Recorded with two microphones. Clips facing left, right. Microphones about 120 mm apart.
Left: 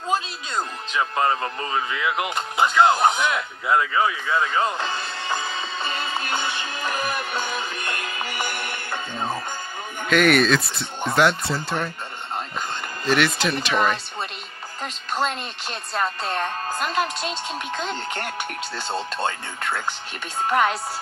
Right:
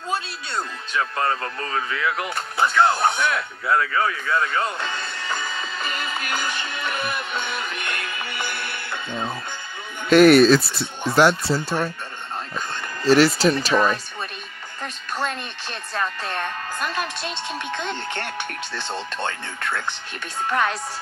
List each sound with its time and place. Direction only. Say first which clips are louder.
0.6 s speech: left 1 dB; 20° left (ahead or behind)
4.6 s speech: left 2 dB; 35° left (ahead or behind)
5.3 s music: left 1 dB; 30° left (ahead or behind)
10.0 s speech: right 6 dB; 35° right (ahead or behind)
10.6 s speech: right 2 dB; 5° right (ahead or behind)
11.1 s speech: right 3 dB; 35° right (ahead or behind)
13.0 s speech: right 6 dB; 35° right (ahead or behind)
14.8 s music: left 2 dB; 20° left (ahead or behind)
16.2 s speech: left 2 dB; 35° left (ahead or behind)
18.7 s speech: left 2 dB; 10° left (ahead or behind)
20.4 s music: left 2 dB; 20° left (ahead or behind)